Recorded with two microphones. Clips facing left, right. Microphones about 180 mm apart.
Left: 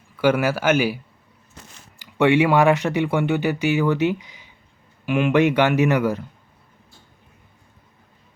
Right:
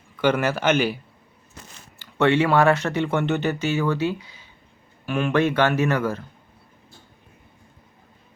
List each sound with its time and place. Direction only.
0.2 s speech: 10° left (ahead or behind)
2.0 s speech: 15° left (ahead or behind)